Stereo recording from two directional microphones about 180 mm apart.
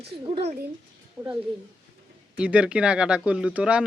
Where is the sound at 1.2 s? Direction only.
20° right (ahead or behind).